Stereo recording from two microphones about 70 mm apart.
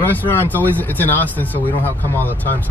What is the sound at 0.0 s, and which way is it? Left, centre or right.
Speech, left.